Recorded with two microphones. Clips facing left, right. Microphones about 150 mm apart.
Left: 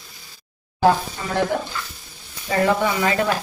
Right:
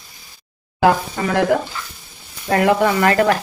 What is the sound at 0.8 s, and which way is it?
Sizzle, 80° right.